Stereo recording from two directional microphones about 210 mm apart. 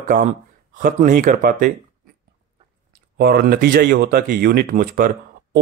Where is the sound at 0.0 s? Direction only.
40° right (ahead or behind).